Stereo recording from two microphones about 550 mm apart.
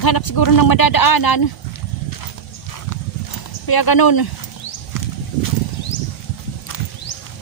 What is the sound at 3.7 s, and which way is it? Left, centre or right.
Speech, left.